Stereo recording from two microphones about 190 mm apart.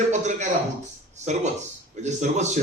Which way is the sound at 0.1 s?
40° right (ahead or behind).